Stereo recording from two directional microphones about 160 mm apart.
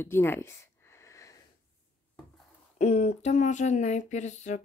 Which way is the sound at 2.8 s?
45° left (ahead or behind).